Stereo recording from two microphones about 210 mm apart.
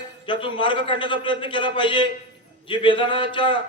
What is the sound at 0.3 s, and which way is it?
A man's voice, 25° left (ahead or behind).